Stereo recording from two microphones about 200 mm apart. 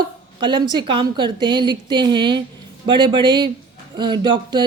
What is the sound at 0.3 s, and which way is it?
A woman's voice, 25° right (ahead or behind).